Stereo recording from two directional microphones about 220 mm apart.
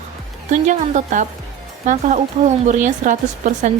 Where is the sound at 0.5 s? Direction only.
35° right (ahead or behind).